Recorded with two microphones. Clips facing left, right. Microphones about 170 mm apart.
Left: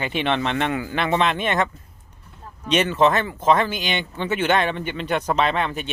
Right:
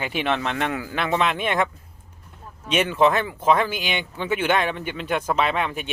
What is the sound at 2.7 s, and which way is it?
Speech, 10° right (ahead or behind).